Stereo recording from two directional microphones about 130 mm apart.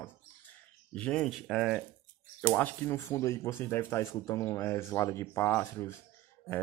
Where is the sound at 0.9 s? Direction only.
10° left (ahead or behind).